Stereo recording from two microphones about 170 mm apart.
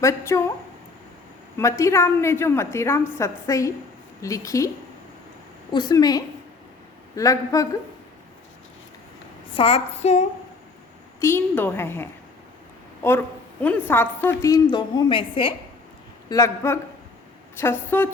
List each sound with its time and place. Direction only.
0.0 s a woman's voice: 15° left (ahead or behind)
1.5 s a woman's voice: 15° left (ahead or behind)
5.7 s a woman's voice: 25° left (ahead or behind)
9.6 s child singing: 35° left (ahead or behind)
11.2 s a woman's voice: 15° left (ahead or behind); by 15.5 s 30° left (ahead or behind)
16.3 s a woman's voice: 15° left (ahead or behind)